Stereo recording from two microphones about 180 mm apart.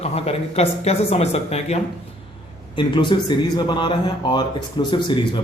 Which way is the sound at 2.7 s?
25° left (ahead or behind).